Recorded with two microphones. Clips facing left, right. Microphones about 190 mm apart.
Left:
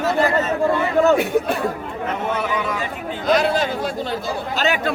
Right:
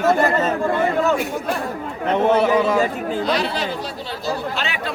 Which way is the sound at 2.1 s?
30° right (ahead or behind).